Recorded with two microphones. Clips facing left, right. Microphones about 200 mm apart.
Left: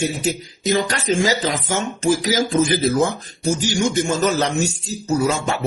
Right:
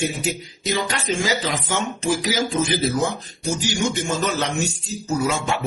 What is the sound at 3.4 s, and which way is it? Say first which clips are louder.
Speech: left 4 dB; 45° left (ahead or behind).